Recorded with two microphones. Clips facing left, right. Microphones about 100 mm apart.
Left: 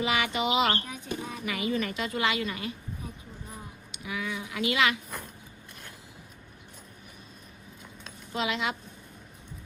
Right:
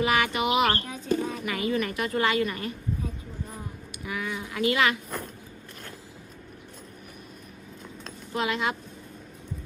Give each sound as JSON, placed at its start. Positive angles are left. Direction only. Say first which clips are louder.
{"t": 0.0, "sound": "music", "louder": "right 4 dB", "side_deg": -55}
{"t": 0.3, "sound": "bird", "louder": "right 2 dB", "side_deg": -60}
{"t": 0.8, "sound": "speech", "louder": "right 8 dB", "side_deg": 15}
{"t": 1.5, "sound": "speech", "louder": "even", "side_deg": -50}
{"t": 4.0, "sound": "speech", "louder": "right 2 dB", "side_deg": -50}
{"t": 8.3, "sound": "speech", "louder": "right 3 dB", "side_deg": -55}